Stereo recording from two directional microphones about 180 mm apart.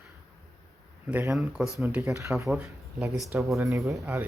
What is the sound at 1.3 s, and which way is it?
A woman's voice, 5° right (ahead or behind).